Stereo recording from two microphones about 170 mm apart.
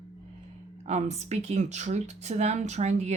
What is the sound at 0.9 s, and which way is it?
Speech, 40° right (ahead or behind).